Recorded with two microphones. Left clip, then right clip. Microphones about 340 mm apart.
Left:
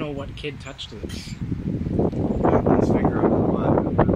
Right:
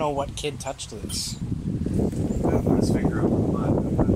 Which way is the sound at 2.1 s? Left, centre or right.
Left.